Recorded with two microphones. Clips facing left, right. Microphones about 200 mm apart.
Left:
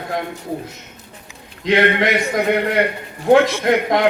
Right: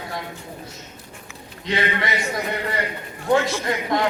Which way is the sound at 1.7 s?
65° left (ahead or behind).